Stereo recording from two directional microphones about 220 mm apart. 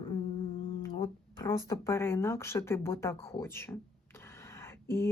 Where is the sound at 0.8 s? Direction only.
15° left (ahead or behind).